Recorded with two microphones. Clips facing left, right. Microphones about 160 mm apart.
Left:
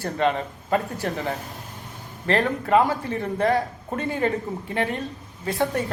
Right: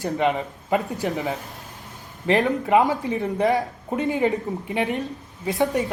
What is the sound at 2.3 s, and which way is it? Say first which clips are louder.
Speech: right 2 dB; 20° right (ahead or behind).